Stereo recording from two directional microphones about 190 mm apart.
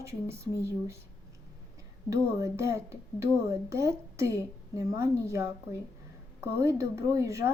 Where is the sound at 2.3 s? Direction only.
15° right (ahead or behind).